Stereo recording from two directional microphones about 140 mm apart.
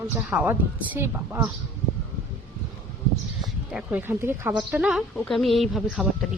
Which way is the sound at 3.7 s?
10° right (ahead or behind).